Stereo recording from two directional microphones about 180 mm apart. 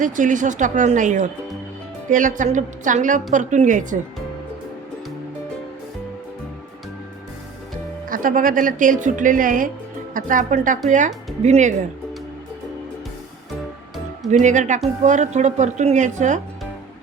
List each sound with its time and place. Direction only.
0.0 s a woman's voice: 45° right (ahead or behind)
8.1 s a woman's voice: 50° right (ahead or behind)
14.3 s a woman's voice: 40° right (ahead or behind)